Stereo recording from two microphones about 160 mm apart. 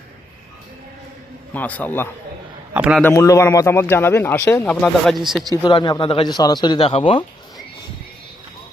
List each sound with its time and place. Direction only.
1.5 s speech: 10° left (ahead or behind)
2.7 s a man's voice: 5° right (ahead or behind)
3.0 s speech: 15° left (ahead or behind); by 5.5 s centre (ahead or behind)
5.6 s speech: 30° left (ahead or behind)